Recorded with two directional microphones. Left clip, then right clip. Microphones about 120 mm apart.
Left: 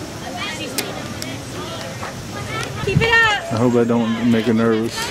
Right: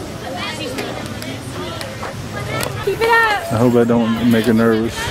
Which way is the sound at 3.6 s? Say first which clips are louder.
Right 4 dB; 5° left (ahead or behind).